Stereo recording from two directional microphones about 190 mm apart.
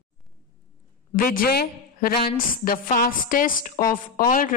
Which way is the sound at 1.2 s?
50° left (ahead or behind).